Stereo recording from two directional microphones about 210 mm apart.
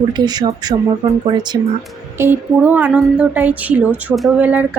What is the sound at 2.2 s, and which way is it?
A woman's voice, 10° right (ahead or behind).